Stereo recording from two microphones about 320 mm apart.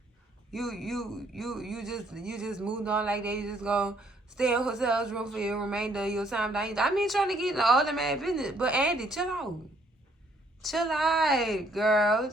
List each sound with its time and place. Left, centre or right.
0.5 s speech: centre
10.6 s speech: centre